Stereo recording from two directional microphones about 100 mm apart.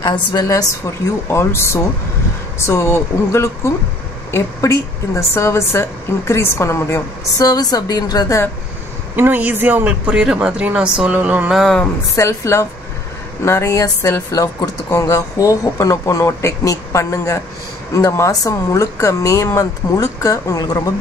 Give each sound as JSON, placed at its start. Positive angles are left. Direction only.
{"t": 0.0, "sound": "a woman's voice", "side_deg": 45}
{"t": 1.3, "sound": "a woman's voice", "side_deg": 25}
{"t": 9.1, "sound": "a man's voice", "side_deg": -20}
{"t": 11.5, "sound": "speech", "side_deg": 0}
{"t": 12.2, "sound": "a woman's voice", "side_deg": 30}